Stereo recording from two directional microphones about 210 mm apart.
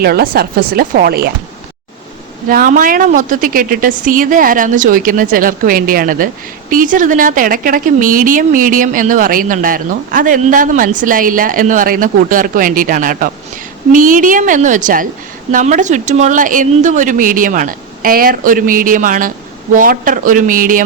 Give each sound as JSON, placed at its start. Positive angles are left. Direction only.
{"t": 0.0, "sound": "speech", "side_deg": -45}
{"t": 2.5, "sound": "a woman's voice", "side_deg": -40}